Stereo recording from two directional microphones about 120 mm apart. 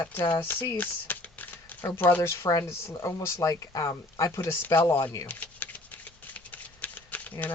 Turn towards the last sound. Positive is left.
turn(degrees=15)  # may be behind; listen again after turning